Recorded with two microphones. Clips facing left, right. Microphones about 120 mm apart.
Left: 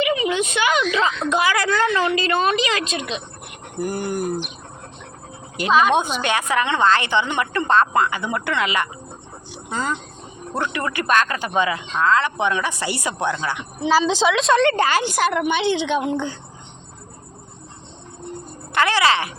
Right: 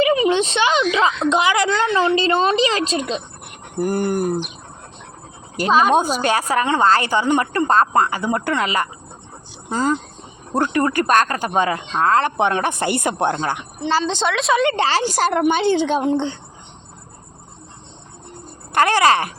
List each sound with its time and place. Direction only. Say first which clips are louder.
0.0 s a woman's voice: right 4 dB; 35° right (ahead or behind)
3.8 s speech: right 4 dB; 50° right (ahead or behind)
5.5 s a woman's voice: right 2 dB; 35° right (ahead or behind)
13.7 s a woman's voice: left 4 dB; centre (ahead or behind)
14.7 s a woman's voice: even; 30° right (ahead or behind)
18.7 s speech: right 3 dB; 45° right (ahead or behind)